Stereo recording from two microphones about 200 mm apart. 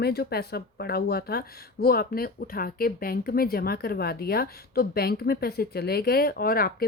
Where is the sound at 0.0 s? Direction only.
55° left (ahead or behind).